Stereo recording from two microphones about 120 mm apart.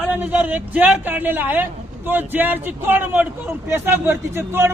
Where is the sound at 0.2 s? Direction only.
15° right (ahead or behind).